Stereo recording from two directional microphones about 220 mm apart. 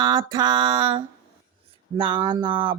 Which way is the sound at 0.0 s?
20° right (ahead or behind).